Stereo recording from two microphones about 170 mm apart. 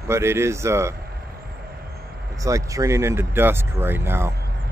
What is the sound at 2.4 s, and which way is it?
Speech, 20° right (ahead or behind).